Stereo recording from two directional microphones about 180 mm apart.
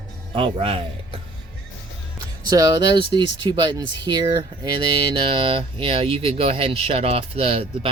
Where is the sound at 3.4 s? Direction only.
25° right (ahead or behind).